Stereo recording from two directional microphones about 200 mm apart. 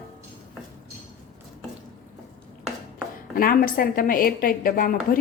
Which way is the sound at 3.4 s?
45° left (ahead or behind).